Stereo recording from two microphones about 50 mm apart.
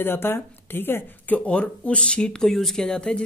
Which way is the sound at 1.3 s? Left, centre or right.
Left.